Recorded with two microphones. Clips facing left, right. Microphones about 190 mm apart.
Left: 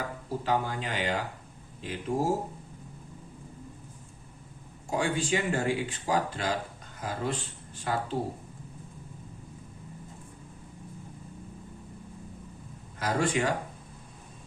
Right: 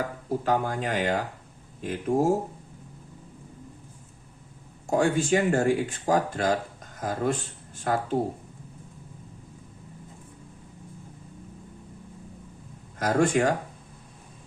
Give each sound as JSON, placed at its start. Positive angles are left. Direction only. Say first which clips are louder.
{"t": 0.3, "sound": "speech", "louder": "right 3 dB", "side_deg": -50}
{"t": 4.9, "sound": "speech", "louder": "right 6 dB", "side_deg": -50}
{"t": 13.0, "sound": "speech", "louder": "right 5 dB", "side_deg": -50}